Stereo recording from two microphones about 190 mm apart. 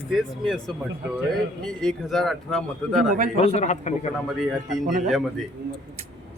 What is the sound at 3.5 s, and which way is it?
Speech, 35° left (ahead or behind).